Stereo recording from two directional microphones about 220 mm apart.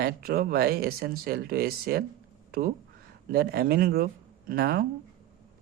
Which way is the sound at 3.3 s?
45° right (ahead or behind).